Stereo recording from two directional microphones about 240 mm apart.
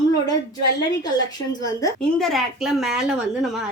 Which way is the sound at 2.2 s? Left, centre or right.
Centre.